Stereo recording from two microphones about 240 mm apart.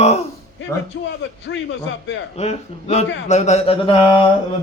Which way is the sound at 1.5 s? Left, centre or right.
Left.